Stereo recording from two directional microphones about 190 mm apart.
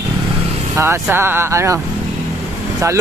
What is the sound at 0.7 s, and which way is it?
Speech, 10° right (ahead or behind).